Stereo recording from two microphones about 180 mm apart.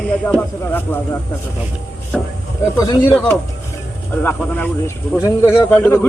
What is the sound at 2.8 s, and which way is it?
A man's voice, 15° left (ahead or behind).